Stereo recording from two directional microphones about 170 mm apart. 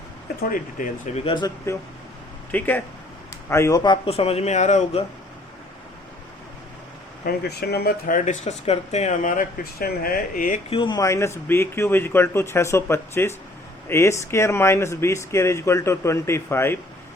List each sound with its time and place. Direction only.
0.8 s speech: 55° left (ahead or behind)
1.1 s a man's voice: 30° left (ahead or behind)
7.3 s speech: 70° left (ahead or behind); by 10.6 s 55° left (ahead or behind)
10.7 s speech: 30° left (ahead or behind)